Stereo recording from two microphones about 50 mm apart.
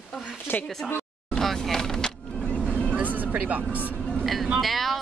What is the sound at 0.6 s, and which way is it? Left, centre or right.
Speech, centre.